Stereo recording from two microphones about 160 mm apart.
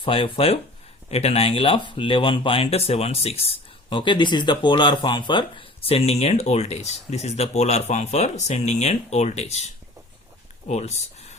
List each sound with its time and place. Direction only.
0.0 s speech: 35° left (ahead or behind)
10.7 s speech: 45° left (ahead or behind)